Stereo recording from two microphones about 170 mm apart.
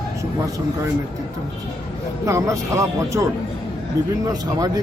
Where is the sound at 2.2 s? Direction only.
15° right (ahead or behind).